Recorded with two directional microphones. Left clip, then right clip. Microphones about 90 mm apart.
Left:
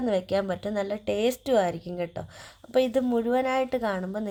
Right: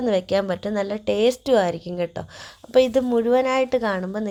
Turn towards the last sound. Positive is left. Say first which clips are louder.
# right 5 dB
turn(degrees=-25)  # may be behind; listen again after turning